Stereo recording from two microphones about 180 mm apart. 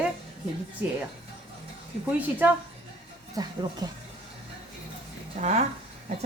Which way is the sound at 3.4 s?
20° right (ahead or behind).